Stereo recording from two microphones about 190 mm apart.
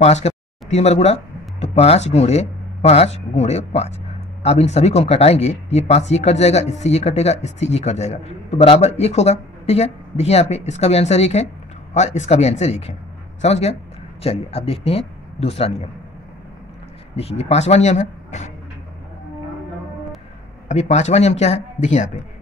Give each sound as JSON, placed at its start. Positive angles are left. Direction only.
{"t": 0.0, "sound": "speech", "side_deg": 35}
{"t": 17.1, "sound": "speech", "side_deg": 30}
{"t": 20.6, "sound": "speech", "side_deg": 35}